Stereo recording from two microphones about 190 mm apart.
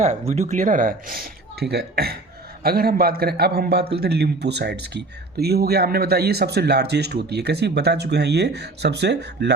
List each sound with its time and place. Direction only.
0.0 s a man's voice: 35° right (ahead or behind); by 9.5 s 60° right (ahead or behind)